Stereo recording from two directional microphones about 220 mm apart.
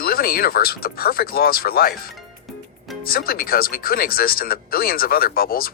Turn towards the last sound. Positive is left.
turn(degrees=40)  # may be behind; listen again after turning